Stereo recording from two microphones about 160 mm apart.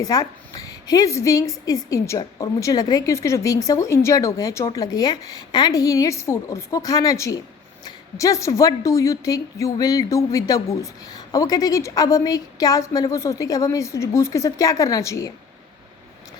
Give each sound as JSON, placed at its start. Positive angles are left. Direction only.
{"t": 0.0, "sound": "a woman's voice", "side_deg": 25}